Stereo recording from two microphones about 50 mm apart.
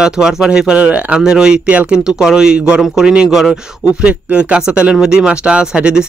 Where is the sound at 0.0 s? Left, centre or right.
Centre.